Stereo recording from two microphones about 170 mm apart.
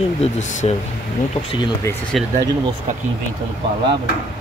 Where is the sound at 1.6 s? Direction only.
15° left (ahead or behind).